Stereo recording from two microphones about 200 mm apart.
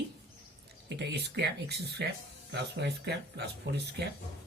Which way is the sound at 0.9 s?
55° right (ahead or behind).